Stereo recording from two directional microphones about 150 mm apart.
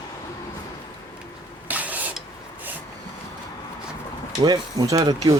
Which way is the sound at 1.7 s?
10° right (ahead or behind).